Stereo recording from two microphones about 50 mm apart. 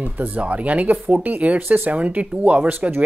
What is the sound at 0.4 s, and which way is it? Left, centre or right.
Speech, right.